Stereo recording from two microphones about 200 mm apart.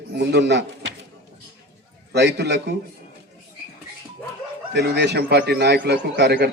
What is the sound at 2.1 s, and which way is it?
Speech, 55° right (ahead or behind).